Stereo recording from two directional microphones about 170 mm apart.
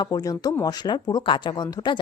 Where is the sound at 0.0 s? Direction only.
20° left (ahead or behind).